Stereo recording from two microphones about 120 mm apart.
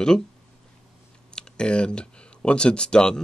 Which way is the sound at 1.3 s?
5° left (ahead or behind).